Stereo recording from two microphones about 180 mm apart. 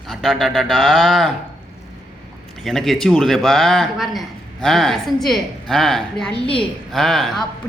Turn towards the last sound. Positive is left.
turn(degrees=0)  # may be behind; listen again after turning